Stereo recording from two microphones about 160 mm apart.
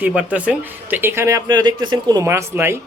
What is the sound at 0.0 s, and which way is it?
A woman's voice, 10° right (ahead or behind).